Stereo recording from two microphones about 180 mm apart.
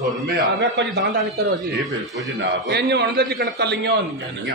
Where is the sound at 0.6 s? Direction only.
70° right (ahead or behind).